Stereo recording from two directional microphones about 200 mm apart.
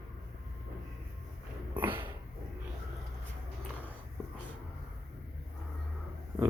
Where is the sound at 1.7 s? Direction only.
10° right (ahead or behind).